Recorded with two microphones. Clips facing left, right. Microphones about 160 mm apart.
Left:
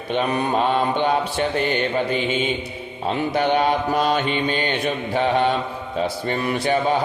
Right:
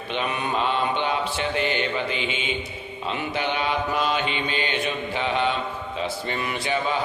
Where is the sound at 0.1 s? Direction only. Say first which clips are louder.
Left 6 dB; 40° left (ahead or behind).